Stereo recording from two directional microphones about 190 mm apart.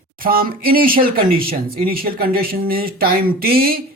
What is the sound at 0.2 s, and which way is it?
Speech, 50° right (ahead or behind).